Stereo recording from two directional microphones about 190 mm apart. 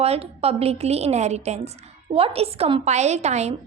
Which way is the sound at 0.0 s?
35° right (ahead or behind).